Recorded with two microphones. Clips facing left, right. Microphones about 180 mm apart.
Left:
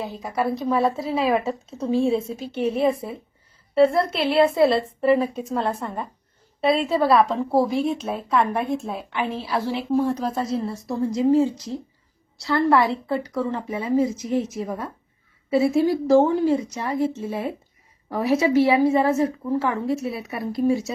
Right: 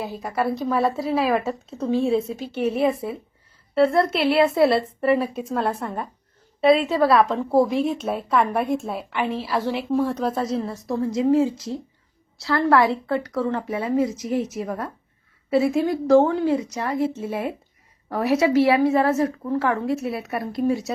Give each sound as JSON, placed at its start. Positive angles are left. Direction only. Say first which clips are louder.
{"t": 0.0, "sound": "a woman's voice", "louder": "even", "side_deg": 0}